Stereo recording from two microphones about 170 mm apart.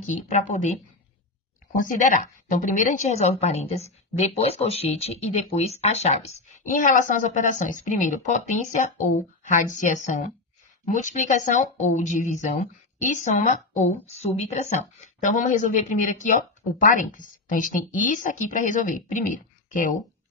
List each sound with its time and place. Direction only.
0.0 s a woman's voice: 45° left (ahead or behind)